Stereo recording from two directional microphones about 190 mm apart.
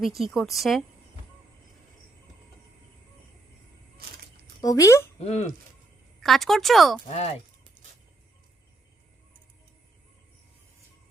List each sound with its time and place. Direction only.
0.2 s speech: centre (ahead or behind)
4.6 s speech: 15° left (ahead or behind)
5.2 s speech: 35° left (ahead or behind)
6.2 s speech: centre (ahead or behind)
7.1 s speech: 35° left (ahead or behind)